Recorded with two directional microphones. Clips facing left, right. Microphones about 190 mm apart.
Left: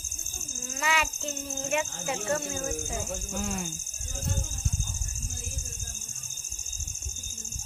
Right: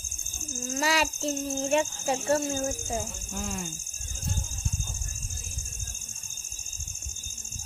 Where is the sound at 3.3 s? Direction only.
Centre (ahead or behind).